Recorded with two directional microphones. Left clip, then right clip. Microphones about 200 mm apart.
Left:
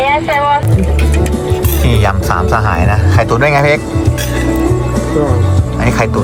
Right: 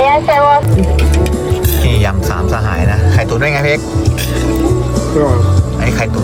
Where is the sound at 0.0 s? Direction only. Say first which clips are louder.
Right 3 dB; 50° right (ahead or behind).